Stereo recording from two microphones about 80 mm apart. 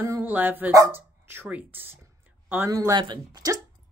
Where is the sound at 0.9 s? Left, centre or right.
Right.